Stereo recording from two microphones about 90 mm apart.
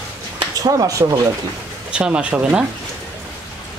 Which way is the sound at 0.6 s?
45° right (ahead or behind).